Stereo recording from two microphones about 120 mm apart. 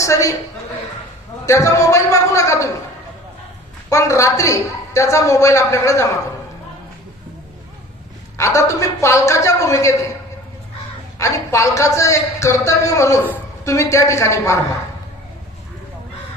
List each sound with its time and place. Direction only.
0.0 s speech: 25° left (ahead or behind)
1.5 s speech: 25° left (ahead or behind)
3.8 s speech: 25° left (ahead or behind)
8.4 s speech: 25° left (ahead or behind)
11.2 s speech: 25° left (ahead or behind)